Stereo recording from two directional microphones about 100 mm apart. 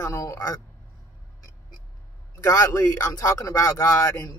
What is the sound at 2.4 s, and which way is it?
Speech, 35° left (ahead or behind).